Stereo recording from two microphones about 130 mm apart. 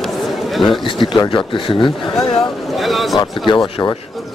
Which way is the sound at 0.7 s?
40° left (ahead or behind).